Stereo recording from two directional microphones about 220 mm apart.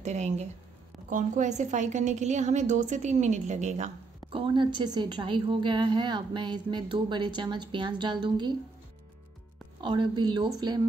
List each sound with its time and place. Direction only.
0.0 s a woman's voice: 30° right (ahead or behind)
9.8 s a woman's voice: 20° right (ahead or behind)